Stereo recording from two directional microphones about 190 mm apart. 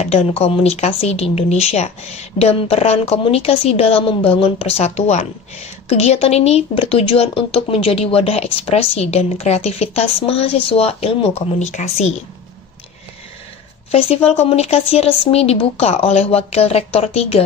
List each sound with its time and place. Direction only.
0.0 s speech: 30° left (ahead or behind)
13.9 s speech: 30° left (ahead or behind)